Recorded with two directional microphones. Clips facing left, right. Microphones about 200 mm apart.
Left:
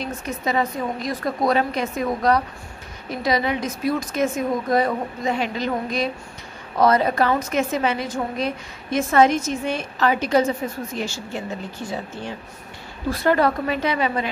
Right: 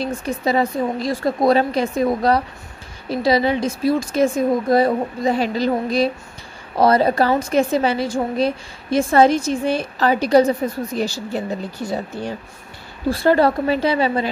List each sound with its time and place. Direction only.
0.0 s a woman's voice: 30° right (ahead or behind)
13.1 s a woman's voice: 30° right (ahead or behind)